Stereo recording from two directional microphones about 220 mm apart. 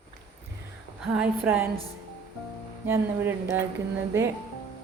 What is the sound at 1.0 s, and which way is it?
Speech, 5° right (ahead or behind).